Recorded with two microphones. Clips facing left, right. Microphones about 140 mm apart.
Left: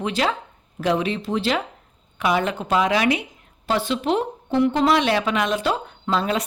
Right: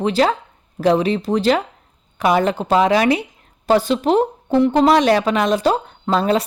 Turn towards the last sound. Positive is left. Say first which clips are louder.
# right 5 dB
turn(degrees=-40)  # may be behind; listen again after turning